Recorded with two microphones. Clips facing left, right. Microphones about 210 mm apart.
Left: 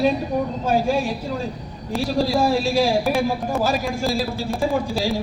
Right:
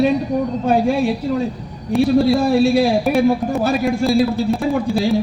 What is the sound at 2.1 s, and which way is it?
A man's voice, 60° right (ahead or behind).